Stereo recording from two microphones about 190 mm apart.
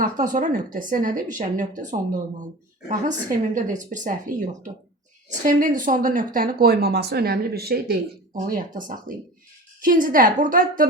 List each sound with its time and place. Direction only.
0.0 s speech: 45° right (ahead or behind)